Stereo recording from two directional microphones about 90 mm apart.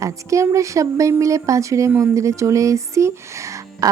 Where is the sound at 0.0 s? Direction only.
35° right (ahead or behind).